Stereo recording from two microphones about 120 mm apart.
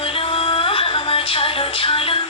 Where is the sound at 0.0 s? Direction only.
50° left (ahead or behind).